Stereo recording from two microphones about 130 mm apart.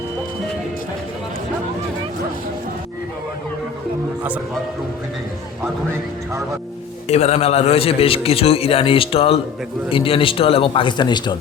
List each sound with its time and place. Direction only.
7.1 s a man's voice: 55° left (ahead or behind); by 11.3 s 35° left (ahead or behind)